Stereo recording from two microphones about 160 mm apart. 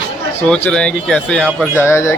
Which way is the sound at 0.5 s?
5° left (ahead or behind).